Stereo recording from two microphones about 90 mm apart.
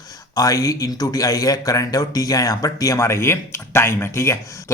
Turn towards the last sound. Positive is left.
turn(degrees=30)  # may be behind; listen again after turning